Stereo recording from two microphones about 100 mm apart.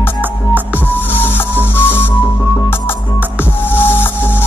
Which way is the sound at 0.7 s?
20° left (ahead or behind).